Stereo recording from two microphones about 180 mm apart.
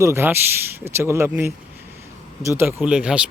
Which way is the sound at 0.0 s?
15° right (ahead or behind).